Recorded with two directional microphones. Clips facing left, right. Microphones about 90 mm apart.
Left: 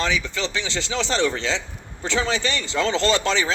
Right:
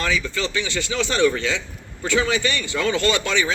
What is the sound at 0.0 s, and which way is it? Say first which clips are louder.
Speech: right 1 dB; 20° left (ahead or behind).